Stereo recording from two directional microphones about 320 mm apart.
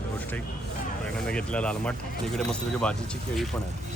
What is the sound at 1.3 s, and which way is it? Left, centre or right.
Speech, centre.